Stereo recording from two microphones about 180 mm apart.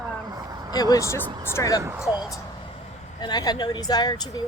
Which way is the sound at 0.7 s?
20° left (ahead or behind).